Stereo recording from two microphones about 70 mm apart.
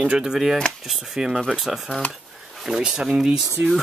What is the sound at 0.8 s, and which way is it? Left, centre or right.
Speech, centre.